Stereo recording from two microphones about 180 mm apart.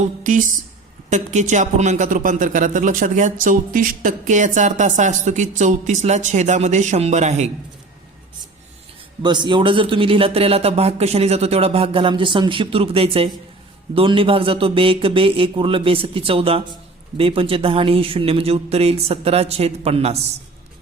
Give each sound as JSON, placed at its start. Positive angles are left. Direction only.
{"t": 0.2, "sound": "speech", "side_deg": -45}
{"t": 9.2, "sound": "speech", "side_deg": -25}